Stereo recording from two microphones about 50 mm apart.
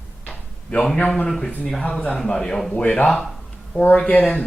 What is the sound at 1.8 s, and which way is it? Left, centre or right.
Speech, left.